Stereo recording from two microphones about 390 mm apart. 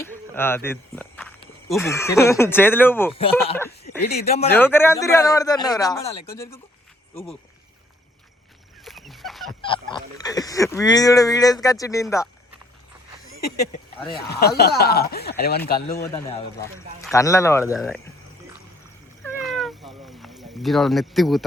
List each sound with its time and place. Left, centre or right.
0.0 s walk: centre
1.7 s speech: centre
8.8 s fowl: centre
9.6 s speech: centre
14.3 s speech: left
16.0 s speech: centre
19.2 s cat: centre